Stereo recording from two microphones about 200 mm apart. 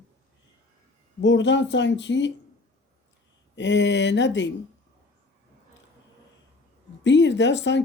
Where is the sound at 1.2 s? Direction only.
65° left (ahead or behind).